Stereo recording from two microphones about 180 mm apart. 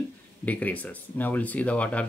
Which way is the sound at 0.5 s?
10° left (ahead or behind).